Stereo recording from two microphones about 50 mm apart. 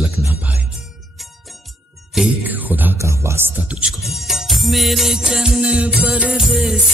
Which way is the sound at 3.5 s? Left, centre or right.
Right.